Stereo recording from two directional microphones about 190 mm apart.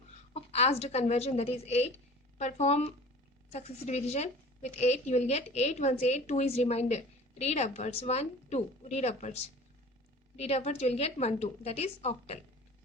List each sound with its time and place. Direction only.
0.3 s a woman's voice: 35° left (ahead or behind)
10.3 s a woman's voice: 35° left (ahead or behind)